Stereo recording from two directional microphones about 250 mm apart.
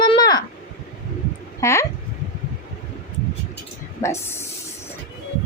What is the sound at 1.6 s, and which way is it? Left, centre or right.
Speech, centre.